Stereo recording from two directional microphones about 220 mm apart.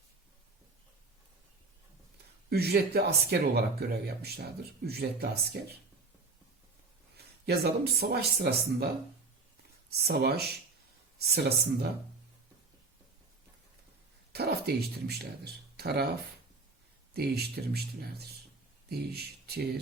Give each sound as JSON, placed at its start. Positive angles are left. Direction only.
{"t": 2.5, "sound": "speech", "side_deg": -45}
{"t": 7.4, "sound": "speech", "side_deg": -45}
{"t": 9.9, "sound": "speech", "side_deg": -45}
{"t": 14.3, "sound": "speech", "side_deg": -45}
{"t": 17.2, "sound": "speech", "side_deg": -45}